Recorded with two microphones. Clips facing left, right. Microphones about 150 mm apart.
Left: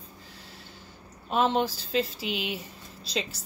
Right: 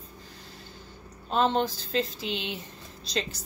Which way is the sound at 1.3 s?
5° left (ahead or behind).